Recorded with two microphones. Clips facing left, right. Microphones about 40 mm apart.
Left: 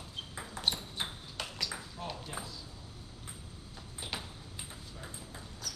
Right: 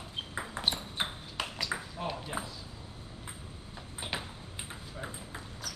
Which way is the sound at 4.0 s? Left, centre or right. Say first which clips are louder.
Right 4 dB; right.